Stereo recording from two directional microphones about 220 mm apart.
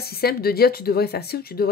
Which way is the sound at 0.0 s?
45° left (ahead or behind).